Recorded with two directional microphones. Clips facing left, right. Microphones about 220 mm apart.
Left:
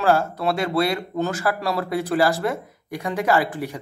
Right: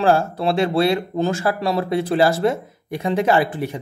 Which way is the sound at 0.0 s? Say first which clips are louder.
Right 2 dB; 30° right (ahead or behind).